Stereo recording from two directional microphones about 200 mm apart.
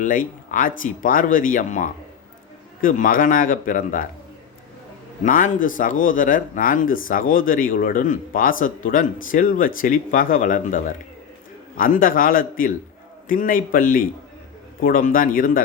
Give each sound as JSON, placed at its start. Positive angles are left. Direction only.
{"t": 0.0, "sound": "speech", "side_deg": 40}
{"t": 5.2, "sound": "speech", "side_deg": 40}